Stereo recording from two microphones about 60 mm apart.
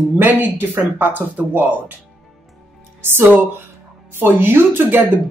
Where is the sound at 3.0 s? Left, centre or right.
Right.